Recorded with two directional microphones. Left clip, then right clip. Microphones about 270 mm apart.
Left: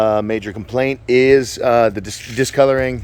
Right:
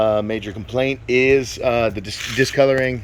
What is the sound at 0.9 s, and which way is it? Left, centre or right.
Speech, left.